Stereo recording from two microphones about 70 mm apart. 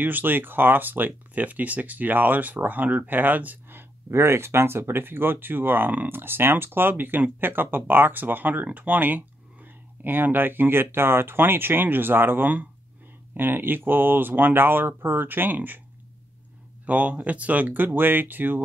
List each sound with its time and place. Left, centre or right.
0.0 s speech: right
4.1 s speech: right
16.8 s speech: right